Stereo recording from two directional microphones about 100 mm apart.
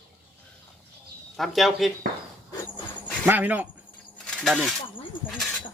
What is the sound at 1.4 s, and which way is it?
Speech, centre (ahead or behind).